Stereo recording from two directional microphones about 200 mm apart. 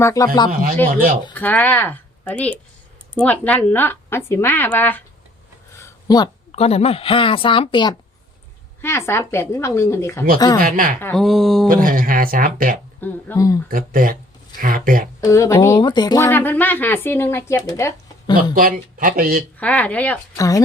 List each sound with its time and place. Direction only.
0.0 s speech: 15° left (ahead or behind)
1.3 s speech: 10° left (ahead or behind)
5.7 s a sound: 15° left (ahead or behind)
6.5 s speech: 30° left (ahead or behind)
8.8 s speech: 10° left (ahead or behind)
10.6 s speech: 45° right (ahead or behind)
11.0 s speech: centre (ahead or behind)
11.7 s speech: 45° right (ahead or behind)
13.0 s speech: 10° left (ahead or behind)
13.7 s speech: 45° right (ahead or behind)
15.2 s speech: 15° left (ahead or behind)
18.5 s speech: 45° right (ahead or behind)
19.5 s speech: 5° left (ahead or behind)